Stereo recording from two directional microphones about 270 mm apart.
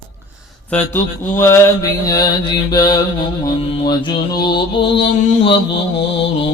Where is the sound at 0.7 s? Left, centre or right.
Centre.